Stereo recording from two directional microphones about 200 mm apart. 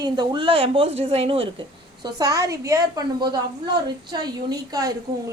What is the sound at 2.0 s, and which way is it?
A woman's voice, 15° right (ahead or behind).